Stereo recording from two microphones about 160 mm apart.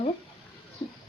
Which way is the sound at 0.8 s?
30° left (ahead or behind).